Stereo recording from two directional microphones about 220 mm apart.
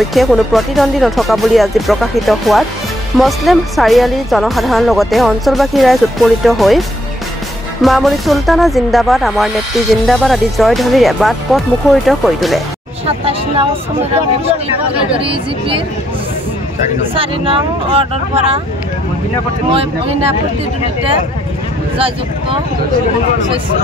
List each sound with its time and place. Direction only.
0.1 s speech: centre (ahead or behind)
7.8 s speech: centre (ahead or behind)
13.0 s speech: 25° right (ahead or behind)
15.1 s speech: 25° right (ahead or behind)
17.0 s speech: 25° right (ahead or behind)
19.7 s speech: 25° right (ahead or behind)